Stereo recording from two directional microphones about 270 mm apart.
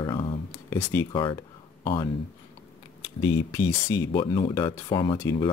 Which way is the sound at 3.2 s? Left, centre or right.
Centre.